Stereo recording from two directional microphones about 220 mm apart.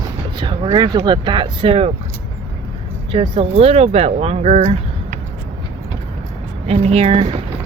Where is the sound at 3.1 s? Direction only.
20° right (ahead or behind).